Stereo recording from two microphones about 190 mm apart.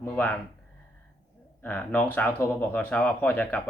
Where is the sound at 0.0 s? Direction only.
10° left (ahead or behind).